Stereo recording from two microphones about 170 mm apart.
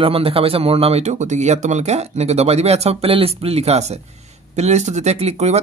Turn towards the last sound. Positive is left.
turn(degrees=-40)  # may be behind; listen again after turning